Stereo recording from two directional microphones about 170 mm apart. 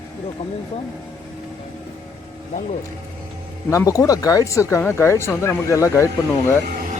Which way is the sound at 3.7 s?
20° left (ahead or behind).